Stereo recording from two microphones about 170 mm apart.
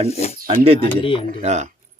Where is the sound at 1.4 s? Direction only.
45° right (ahead or behind).